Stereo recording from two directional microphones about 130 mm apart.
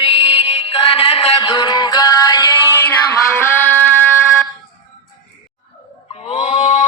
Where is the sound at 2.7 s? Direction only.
15° left (ahead or behind).